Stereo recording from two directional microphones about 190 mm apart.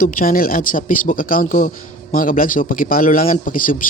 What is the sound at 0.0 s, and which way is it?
A man's voice, 45° left (ahead or behind).